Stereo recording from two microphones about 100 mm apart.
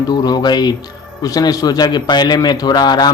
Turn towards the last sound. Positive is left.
turn(degrees=45)  # may be behind; listen again after turning